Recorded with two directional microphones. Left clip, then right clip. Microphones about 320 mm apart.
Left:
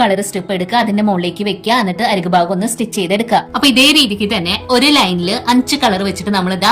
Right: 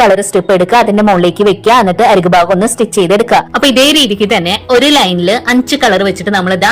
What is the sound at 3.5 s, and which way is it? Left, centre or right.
A woman's voice, centre.